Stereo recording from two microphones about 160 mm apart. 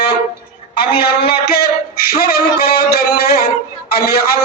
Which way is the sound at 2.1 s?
75° left (ahead or behind).